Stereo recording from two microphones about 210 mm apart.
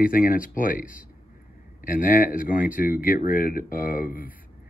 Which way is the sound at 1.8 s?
40° left (ahead or behind).